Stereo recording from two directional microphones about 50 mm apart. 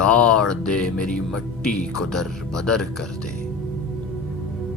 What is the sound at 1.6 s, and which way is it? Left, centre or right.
Speech, centre.